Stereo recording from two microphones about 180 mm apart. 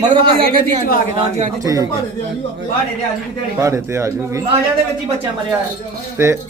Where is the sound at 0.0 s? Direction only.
25° right (ahead or behind).